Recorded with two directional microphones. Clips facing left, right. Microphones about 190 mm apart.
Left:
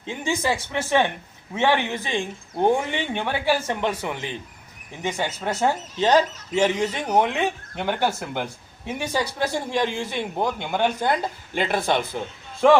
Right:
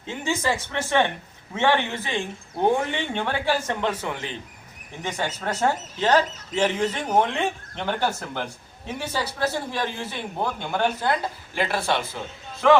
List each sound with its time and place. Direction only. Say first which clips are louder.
0.1 s a man's voice: left 1 dB; 15° left (ahead or behind)